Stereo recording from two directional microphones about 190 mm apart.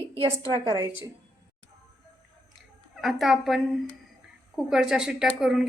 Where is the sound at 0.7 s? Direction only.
10° right (ahead or behind).